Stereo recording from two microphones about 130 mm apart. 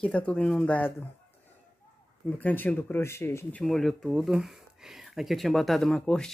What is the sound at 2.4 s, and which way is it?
Speech, 10° left (ahead or behind).